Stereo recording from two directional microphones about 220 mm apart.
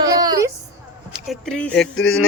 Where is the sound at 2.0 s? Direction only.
65° left (ahead or behind).